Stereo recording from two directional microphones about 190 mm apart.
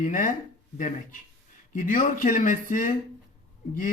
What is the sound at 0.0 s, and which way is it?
Speech, 45° left (ahead or behind).